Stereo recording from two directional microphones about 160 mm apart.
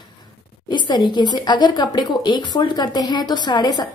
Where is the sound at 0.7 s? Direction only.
30° left (ahead or behind).